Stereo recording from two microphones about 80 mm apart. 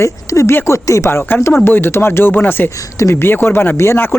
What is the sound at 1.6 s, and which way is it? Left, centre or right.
Speech, left.